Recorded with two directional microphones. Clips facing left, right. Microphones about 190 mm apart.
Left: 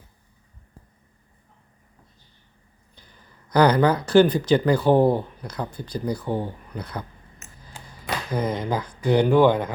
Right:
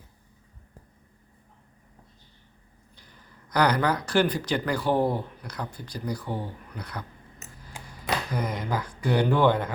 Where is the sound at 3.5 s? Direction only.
25° left (ahead or behind).